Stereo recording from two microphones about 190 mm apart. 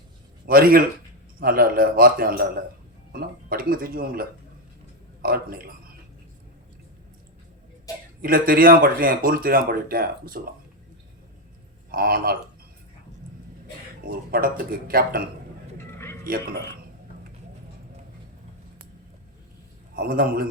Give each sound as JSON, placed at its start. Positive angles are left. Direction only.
{"t": 0.4, "sound": "speech", "side_deg": -50}
{"t": 7.9, "sound": "a sound", "side_deg": 20}
{"t": 8.2, "sound": "speech", "side_deg": -50}
{"t": 11.9, "sound": "speech", "side_deg": -50}
{"t": 14.1, "sound": "speech", "side_deg": -50}
{"t": 20.0, "sound": "speech", "side_deg": -50}